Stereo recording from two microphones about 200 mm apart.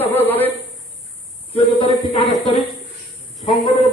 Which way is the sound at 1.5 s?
25° left (ahead or behind).